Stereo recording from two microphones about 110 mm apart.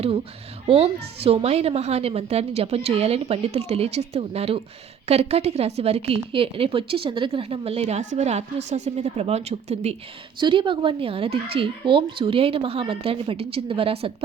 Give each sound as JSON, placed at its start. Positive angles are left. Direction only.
{"t": 0.7, "sound": "speech", "side_deg": -60}
{"t": 10.4, "sound": "speech", "side_deg": -50}